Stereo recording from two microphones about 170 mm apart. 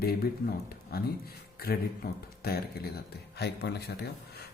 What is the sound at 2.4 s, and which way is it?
A man's voice, 65° left (ahead or behind).